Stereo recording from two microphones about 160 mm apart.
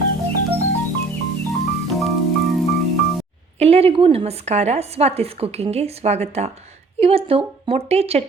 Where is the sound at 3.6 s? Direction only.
40° right (ahead or behind).